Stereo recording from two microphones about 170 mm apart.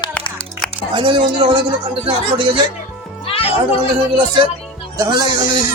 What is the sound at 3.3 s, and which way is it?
Cat, 35° left (ahead or behind).